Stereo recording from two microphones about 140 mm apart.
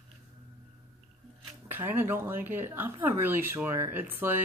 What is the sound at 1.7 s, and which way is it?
Speech, 15° right (ahead or behind).